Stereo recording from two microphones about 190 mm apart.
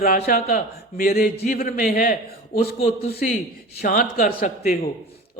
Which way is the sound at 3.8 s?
45° left (ahead or behind).